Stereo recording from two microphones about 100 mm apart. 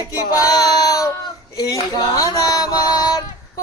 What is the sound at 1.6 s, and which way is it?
Music, 35° left (ahead or behind).